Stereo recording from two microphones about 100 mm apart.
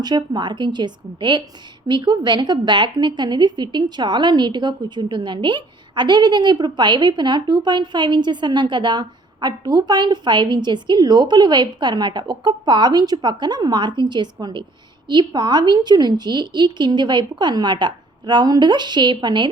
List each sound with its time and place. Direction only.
0.0 s a woman's voice: 45° right (ahead or behind)